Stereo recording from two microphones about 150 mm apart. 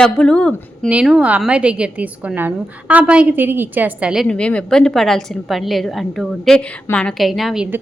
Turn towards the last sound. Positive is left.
turn(degrees=-5)  # may be behind; listen again after turning